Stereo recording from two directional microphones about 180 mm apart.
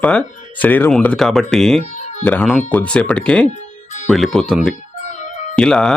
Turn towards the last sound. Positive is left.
turn(degrees=5)  # may be behind; listen again after turning